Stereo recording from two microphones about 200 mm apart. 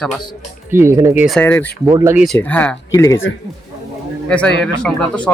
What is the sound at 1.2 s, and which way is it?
Speech, 5° left (ahead or behind).